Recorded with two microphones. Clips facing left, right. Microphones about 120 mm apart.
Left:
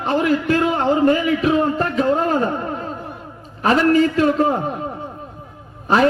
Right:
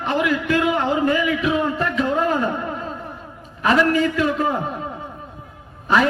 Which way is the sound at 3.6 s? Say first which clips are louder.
Left 3 dB; 40° left (ahead or behind).